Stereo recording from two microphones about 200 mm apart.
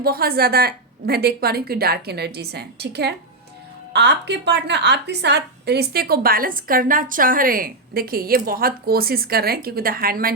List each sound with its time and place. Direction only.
0.0 s a woman's voice: 50° right (ahead or behind)